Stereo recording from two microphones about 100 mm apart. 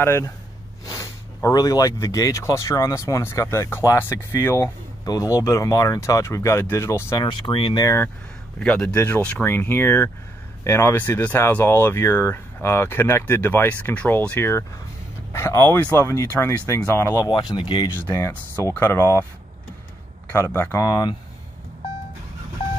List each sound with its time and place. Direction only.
0.0 s speech: 25° left (ahead or behind)
0.8 s speech: 35° left (ahead or behind)
7.2 s speech: 50° left (ahead or behind)
7.8 s speech: 30° left (ahead or behind)
8.5 s a man's voice: 10° left (ahead or behind)
8.9 s speech: 25° left (ahead or behind)
17.3 s speech: 50° left (ahead or behind)
17.9 s speech: 25° left (ahead or behind)
20.2 s speech: 25° left (ahead or behind)
20.8 s speech: 40° left (ahead or behind)